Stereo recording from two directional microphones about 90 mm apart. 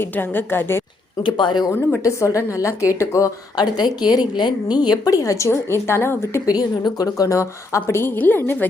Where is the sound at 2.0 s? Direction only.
35° left (ahead or behind).